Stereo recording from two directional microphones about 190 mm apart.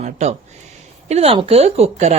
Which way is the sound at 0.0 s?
35° right (ahead or behind).